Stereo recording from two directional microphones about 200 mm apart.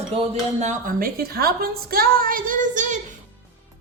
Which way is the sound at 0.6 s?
40° right (ahead or behind).